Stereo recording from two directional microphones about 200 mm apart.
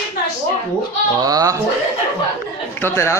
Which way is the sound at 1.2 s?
20° right (ahead or behind).